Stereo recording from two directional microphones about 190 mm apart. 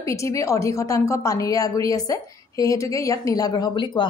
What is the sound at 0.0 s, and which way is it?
A woman's voice, 15° left (ahead or behind).